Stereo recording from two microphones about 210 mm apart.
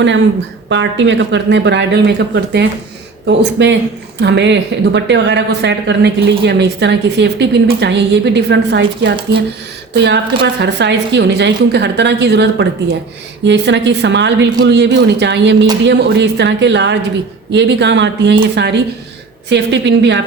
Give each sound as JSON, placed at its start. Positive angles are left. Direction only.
{"t": 0.7, "sound": "speech", "side_deg": -60}